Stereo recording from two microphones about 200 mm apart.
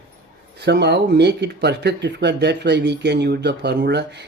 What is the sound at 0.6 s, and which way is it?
Speech, 55° right (ahead or behind).